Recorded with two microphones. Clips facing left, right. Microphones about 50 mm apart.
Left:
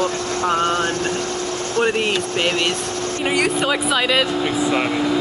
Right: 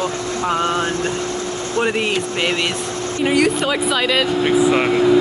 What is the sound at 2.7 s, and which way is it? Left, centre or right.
Vehicle, right.